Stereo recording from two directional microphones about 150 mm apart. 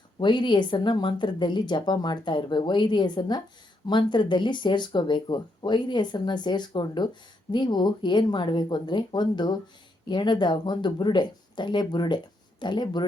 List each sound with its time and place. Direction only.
0.2 s speech: 30° left (ahead or behind)